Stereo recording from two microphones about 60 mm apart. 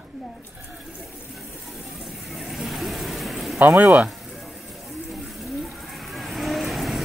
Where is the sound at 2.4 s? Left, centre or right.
Centre.